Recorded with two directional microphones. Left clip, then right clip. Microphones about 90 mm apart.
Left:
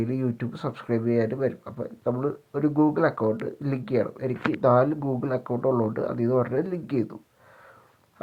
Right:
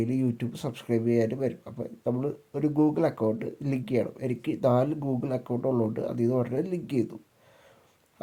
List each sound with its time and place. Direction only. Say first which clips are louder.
0.0 s speech: left 1 dB; 30° right (ahead or behind)